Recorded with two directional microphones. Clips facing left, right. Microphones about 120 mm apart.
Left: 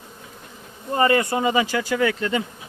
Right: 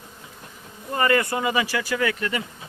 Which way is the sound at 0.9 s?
25° left (ahead or behind).